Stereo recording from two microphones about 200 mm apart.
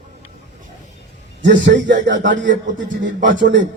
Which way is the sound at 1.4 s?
65° right (ahead or behind).